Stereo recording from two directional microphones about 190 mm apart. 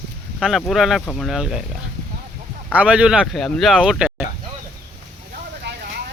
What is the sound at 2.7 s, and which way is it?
Speech, 5° right (ahead or behind).